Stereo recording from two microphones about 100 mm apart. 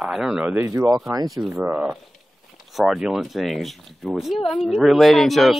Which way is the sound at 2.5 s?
Centre (ahead or behind).